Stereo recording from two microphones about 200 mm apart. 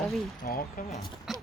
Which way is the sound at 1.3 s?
Centre (ahead or behind).